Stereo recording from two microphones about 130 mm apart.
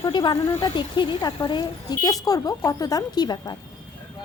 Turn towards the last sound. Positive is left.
turn(degrees=35)  # may be behind; listen again after turning